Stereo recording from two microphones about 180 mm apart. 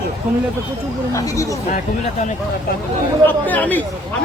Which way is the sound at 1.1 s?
15° left (ahead or behind).